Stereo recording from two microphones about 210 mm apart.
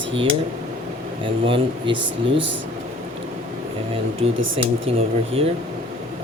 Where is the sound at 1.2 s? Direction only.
25° right (ahead or behind).